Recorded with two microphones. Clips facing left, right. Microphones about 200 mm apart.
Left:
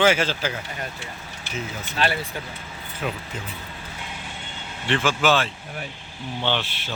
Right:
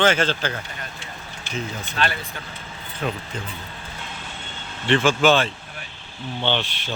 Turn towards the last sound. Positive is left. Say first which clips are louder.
# right 1 dB
turn(degrees=5)  # may be behind; listen again after turning